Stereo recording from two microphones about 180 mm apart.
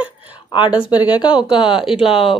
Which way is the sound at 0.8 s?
25° left (ahead or behind).